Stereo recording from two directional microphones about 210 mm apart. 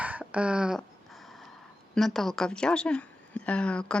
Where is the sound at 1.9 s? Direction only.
Centre (ahead or behind).